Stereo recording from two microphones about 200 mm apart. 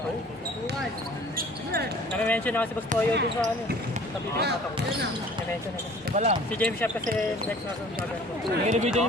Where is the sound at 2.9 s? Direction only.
40° right (ahead or behind).